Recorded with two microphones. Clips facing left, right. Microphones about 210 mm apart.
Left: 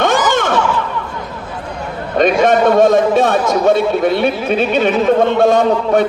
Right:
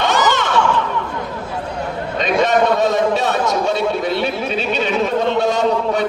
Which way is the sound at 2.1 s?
50° left (ahead or behind).